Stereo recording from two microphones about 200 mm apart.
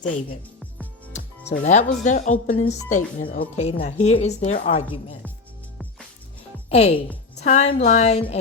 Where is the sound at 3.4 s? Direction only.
30° left (ahead or behind).